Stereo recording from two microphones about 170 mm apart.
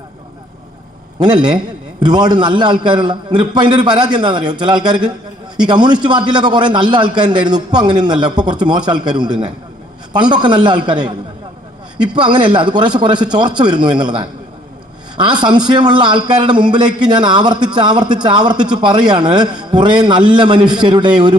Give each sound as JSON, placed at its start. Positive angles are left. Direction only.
{"t": 1.2, "sound": "a man's voice", "side_deg": -25}
{"t": 12.1, "sound": "a man's voice", "side_deg": -25}